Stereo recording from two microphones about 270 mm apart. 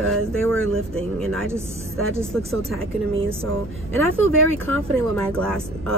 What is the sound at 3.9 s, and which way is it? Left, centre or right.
Speech, right.